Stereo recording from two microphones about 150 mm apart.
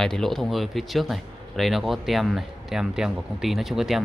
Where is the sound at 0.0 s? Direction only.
5° left (ahead or behind).